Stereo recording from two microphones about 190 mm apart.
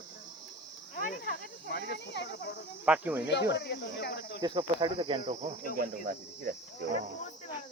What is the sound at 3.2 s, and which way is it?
Speech, 65° left (ahead or behind).